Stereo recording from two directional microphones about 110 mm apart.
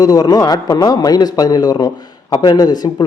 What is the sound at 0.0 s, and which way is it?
A man's voice, 35° left (ahead or behind).